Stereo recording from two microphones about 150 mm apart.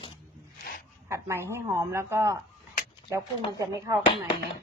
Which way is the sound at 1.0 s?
20° right (ahead or behind).